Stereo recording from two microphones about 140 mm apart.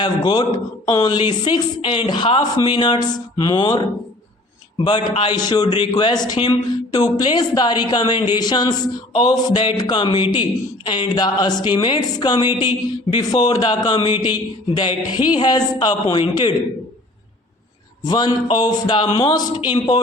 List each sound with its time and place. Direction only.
0.0 s a woman's voice: 30° left (ahead or behind)
18.0 s a woman's voice: 30° left (ahead or behind)
19.3 s a man's voice: 25° left (ahead or behind)